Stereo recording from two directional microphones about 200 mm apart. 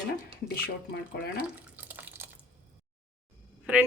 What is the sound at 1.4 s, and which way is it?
Drip, 10° right (ahead or behind).